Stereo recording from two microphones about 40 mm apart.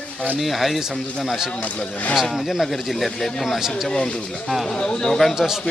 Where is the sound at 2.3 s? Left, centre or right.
Centre.